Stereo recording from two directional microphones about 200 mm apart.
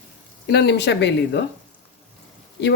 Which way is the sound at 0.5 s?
55° left (ahead or behind).